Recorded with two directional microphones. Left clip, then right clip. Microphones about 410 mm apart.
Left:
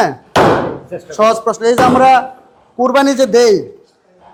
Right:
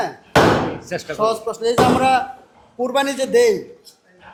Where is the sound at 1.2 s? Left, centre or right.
Left.